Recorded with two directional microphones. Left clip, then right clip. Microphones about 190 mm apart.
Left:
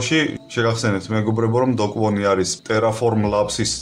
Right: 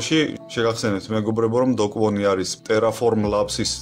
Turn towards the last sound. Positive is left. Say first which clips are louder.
# left 2 dB
turn(degrees=-35)  # may be behind; listen again after turning